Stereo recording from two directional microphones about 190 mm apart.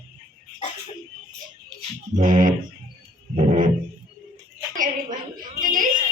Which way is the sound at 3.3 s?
40° right (ahead or behind).